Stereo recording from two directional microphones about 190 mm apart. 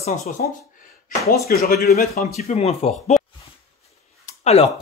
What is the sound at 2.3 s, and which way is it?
Speech, 35° left (ahead or behind).